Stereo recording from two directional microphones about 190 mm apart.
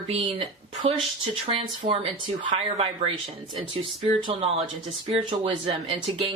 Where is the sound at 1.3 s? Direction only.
30° right (ahead or behind).